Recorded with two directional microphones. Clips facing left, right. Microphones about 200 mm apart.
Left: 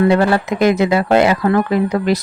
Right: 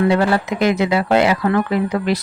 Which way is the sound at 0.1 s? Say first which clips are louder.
Left 2 dB; 45° left (ahead or behind).